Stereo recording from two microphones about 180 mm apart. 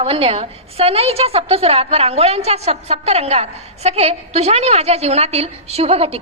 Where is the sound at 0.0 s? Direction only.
35° right (ahead or behind).